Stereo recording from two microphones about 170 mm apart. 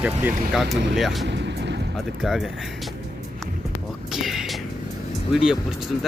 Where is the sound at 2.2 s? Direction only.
Centre (ahead or behind).